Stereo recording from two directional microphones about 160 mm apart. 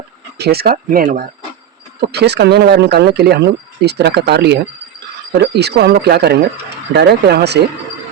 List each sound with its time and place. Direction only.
0.3 s speech: 85° right; by 1.2 s 60° right (ahead or behind)
2.0 s speech: 90° right